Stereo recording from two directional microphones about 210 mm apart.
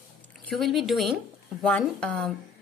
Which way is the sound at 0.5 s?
Centre (ahead or behind).